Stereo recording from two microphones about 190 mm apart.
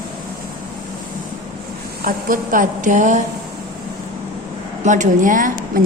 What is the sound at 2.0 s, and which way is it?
A woman's voice, 45° right (ahead or behind).